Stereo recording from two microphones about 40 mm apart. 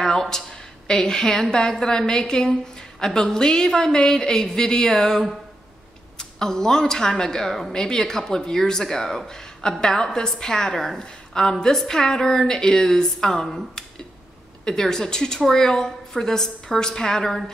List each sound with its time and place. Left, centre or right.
0.0 s a woman's voice: centre